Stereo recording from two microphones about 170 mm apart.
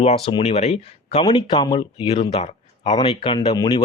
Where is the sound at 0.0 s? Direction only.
35° left (ahead or behind).